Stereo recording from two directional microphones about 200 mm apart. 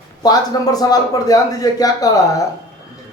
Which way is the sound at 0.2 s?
20° left (ahead or behind).